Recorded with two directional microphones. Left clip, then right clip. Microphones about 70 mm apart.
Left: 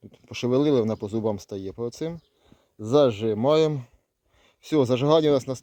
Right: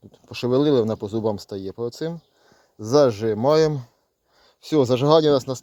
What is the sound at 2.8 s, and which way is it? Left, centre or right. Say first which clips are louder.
Speech: right 3 dB; centre.